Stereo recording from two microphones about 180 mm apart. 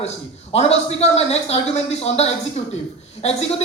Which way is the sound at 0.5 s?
35° left (ahead or behind).